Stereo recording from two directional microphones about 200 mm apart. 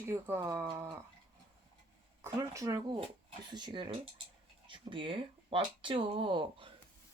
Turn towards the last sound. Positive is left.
turn(degrees=-25)  # may be behind; listen again after turning